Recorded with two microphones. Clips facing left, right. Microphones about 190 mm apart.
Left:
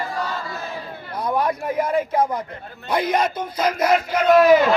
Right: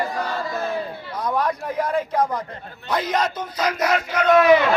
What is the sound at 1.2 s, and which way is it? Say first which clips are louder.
Speech: left 1 dB; 10° left (ahead or behind).